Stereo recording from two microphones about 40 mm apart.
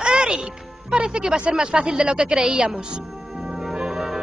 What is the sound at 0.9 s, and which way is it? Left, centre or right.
A woman's voice, right.